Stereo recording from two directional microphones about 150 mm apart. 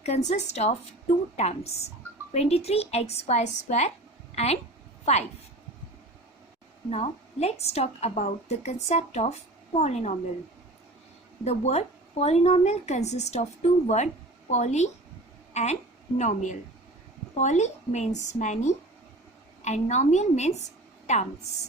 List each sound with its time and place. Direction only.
0.0 s speech: 50° left (ahead or behind)
6.9 s a woman's voice: 45° left (ahead or behind)
11.4 s a woman's voice: 45° left (ahead or behind)